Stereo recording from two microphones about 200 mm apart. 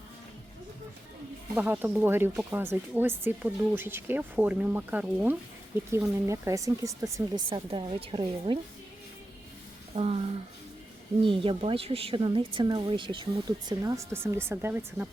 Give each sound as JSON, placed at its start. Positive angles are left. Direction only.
{"t": 1.5, "sound": "speech", "side_deg": -10}
{"t": 9.9, "sound": "speech", "side_deg": -30}